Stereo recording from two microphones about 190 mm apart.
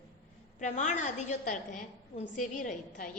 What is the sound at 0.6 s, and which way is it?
A woman's voice, 40° left (ahead or behind).